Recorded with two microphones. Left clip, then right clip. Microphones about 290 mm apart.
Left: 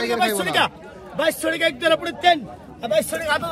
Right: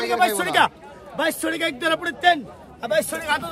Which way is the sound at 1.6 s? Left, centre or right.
Centre.